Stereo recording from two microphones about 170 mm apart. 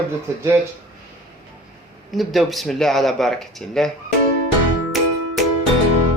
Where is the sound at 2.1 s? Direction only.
Centre (ahead or behind).